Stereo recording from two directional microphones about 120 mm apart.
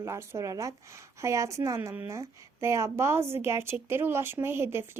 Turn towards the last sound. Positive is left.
turn(degrees=-20)  # may be behind; listen again after turning